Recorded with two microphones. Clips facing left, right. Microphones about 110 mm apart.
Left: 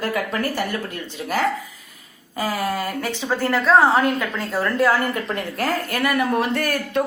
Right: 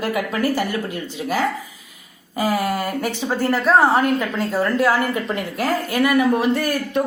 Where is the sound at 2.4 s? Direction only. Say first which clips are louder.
Right 3 dB; 15° right (ahead or behind).